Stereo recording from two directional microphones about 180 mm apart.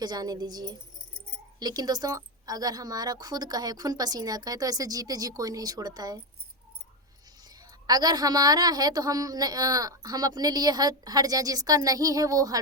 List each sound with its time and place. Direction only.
0.0 s a woman's voice: 20° right (ahead or behind)
7.9 s a woman's voice: 20° right (ahead or behind)